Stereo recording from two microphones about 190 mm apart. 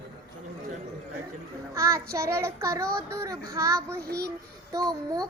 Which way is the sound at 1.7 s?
15° right (ahead or behind).